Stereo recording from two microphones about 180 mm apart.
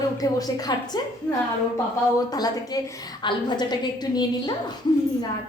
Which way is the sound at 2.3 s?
20° left (ahead or behind).